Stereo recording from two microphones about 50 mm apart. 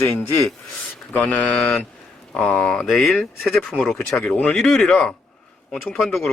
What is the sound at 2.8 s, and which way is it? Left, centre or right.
Speech, centre.